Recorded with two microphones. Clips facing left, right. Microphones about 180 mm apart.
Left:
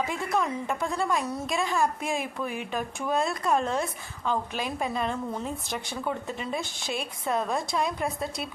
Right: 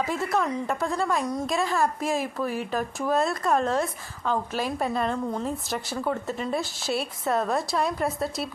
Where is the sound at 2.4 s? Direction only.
40° right (ahead or behind).